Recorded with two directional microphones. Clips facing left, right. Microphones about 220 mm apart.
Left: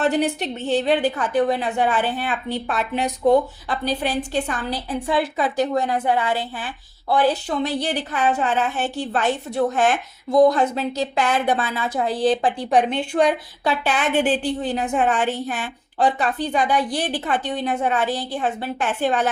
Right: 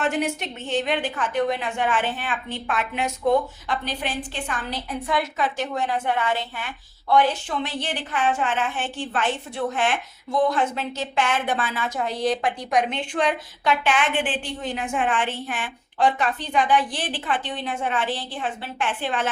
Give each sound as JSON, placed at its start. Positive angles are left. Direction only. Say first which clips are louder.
{"t": 0.0, "sound": "a woman's voice", "louder": "left 4 dB", "side_deg": 35}